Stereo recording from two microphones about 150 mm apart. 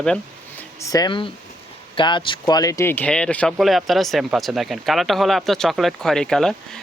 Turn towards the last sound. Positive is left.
turn(degrees=5)  # may be behind; listen again after turning